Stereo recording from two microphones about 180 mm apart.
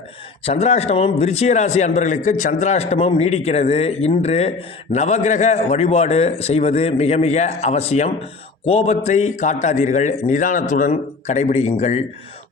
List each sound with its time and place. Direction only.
0.4 s a man's voice: 35° left (ahead or behind)